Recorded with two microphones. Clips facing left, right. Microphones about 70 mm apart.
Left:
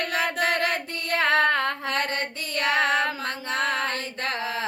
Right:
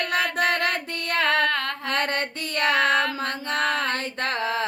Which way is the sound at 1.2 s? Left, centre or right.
Left.